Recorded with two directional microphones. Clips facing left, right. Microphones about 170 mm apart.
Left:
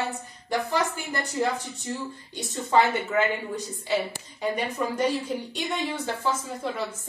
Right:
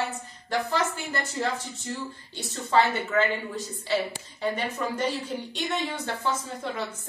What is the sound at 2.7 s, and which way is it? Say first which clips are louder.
A woman's voice: left 1 dB; 15° left (ahead or behind).